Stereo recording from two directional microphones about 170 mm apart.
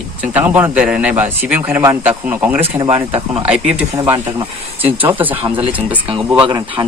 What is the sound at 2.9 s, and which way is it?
Speech, 35° right (ahead or behind).